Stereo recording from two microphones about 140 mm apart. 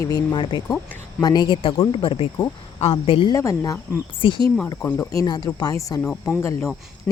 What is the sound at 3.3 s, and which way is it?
Speech, 25° left (ahead or behind).